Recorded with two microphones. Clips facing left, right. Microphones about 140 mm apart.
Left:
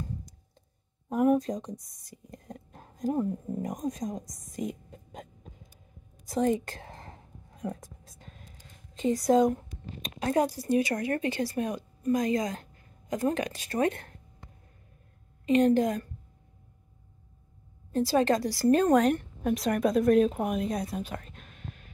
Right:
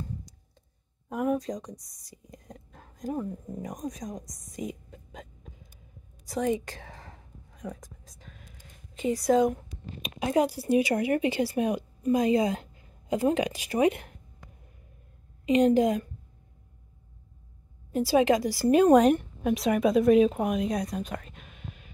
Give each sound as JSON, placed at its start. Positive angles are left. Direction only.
{"t": 1.5, "sound": "speech", "side_deg": 25}
{"t": 2.0, "sound": "speech", "side_deg": 55}
{"t": 2.4, "sound": "a sound", "side_deg": 30}
{"t": 3.1, "sound": "a woman's voice", "side_deg": 10}
{"t": 4.9, "sound": "hiccup", "side_deg": 45}
{"t": 7.1, "sound": "a sound", "side_deg": 25}
{"t": 9.2, "sound": "a woman's voice", "side_deg": 0}
{"t": 15.4, "sound": "a woman's voice", "side_deg": -15}
{"t": 17.9, "sound": "a woman's voice", "side_deg": -10}
{"t": 18.7, "sound": "a woman's voice", "side_deg": -10}
{"t": 19.4, "sound": "speech", "side_deg": 0}